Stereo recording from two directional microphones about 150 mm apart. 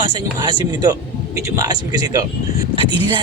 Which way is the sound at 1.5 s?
25° right (ahead or behind).